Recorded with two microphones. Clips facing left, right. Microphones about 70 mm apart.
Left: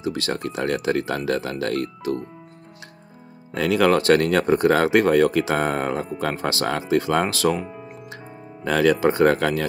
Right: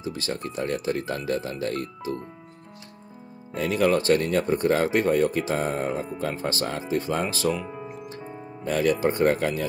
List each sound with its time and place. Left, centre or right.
0.0 s speech: left
3.5 s speech: left
8.6 s speech: left